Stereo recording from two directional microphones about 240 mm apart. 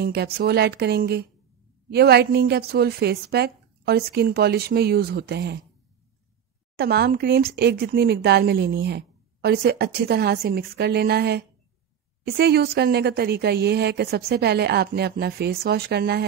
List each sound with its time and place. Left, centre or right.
0.0 s a woman's voice: right
6.8 s a woman's voice: right